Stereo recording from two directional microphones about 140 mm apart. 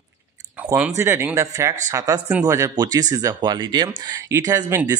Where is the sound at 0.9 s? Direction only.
20° right (ahead or behind).